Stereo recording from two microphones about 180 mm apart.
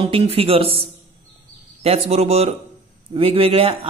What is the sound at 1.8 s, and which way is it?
Speech, 35° right (ahead or behind).